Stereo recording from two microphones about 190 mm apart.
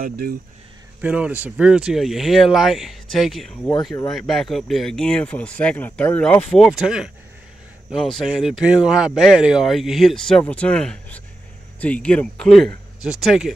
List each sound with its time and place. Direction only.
0.0 s speech: 50° right (ahead or behind)
1.0 s speech: 10° right (ahead or behind)
3.9 s speech: 20° left (ahead or behind)
4.3 s speech: centre (ahead or behind)